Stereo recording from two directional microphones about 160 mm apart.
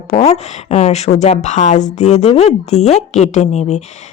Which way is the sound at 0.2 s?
40° left (ahead or behind).